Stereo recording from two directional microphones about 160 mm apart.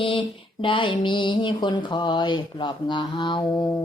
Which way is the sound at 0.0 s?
30° left (ahead or behind).